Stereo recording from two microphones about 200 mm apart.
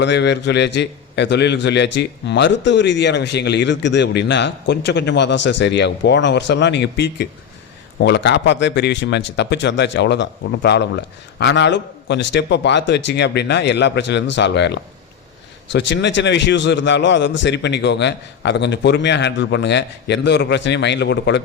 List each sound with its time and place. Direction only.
0.0 s a man's voice: 60° left (ahead or behind)